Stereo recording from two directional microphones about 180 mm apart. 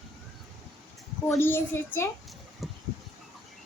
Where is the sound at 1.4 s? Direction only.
10° left (ahead or behind).